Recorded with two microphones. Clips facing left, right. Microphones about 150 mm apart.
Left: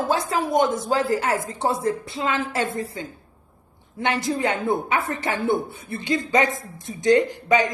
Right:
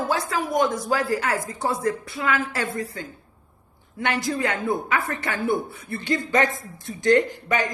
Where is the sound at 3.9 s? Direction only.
25° left (ahead or behind).